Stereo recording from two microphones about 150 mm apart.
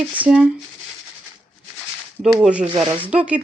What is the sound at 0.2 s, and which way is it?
Speech, 10° right (ahead or behind).